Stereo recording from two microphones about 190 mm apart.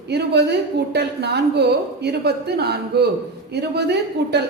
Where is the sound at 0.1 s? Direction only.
60° right (ahead or behind).